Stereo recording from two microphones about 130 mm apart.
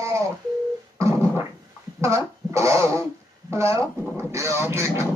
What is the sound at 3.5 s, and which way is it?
Speech, 20° right (ahead or behind).